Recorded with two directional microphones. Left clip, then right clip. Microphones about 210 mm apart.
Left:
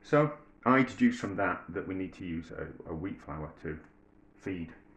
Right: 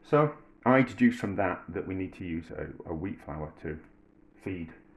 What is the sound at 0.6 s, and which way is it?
Speech, 35° right (ahead or behind).